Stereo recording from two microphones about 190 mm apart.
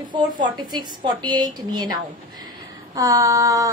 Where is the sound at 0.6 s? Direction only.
25° right (ahead or behind).